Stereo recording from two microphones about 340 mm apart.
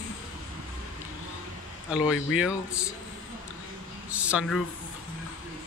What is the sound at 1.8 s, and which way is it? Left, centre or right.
Speech, centre.